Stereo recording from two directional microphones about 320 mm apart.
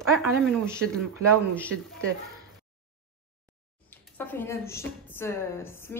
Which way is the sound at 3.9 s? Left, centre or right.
Centre.